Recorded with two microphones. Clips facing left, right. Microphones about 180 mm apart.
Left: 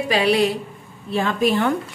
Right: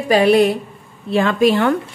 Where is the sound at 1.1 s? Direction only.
90° right.